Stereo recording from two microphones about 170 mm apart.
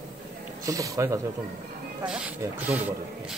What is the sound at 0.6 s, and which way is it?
Speech, 20° right (ahead or behind).